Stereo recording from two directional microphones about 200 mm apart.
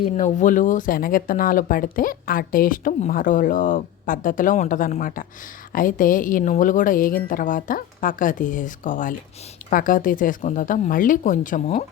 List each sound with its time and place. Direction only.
0.0 s a woman's voice: 40° left (ahead or behind)